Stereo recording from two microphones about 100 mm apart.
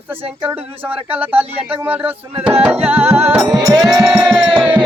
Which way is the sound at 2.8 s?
20° right (ahead or behind).